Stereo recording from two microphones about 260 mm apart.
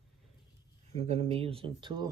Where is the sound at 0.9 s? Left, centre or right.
Right.